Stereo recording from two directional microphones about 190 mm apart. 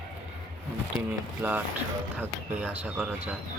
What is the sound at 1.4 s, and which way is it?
Speech, 10° right (ahead or behind).